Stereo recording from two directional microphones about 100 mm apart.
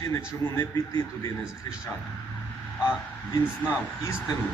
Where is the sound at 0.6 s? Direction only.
45° left (ahead or behind).